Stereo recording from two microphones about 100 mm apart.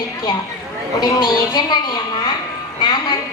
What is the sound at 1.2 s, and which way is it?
A woman's voice, 45° left (ahead or behind).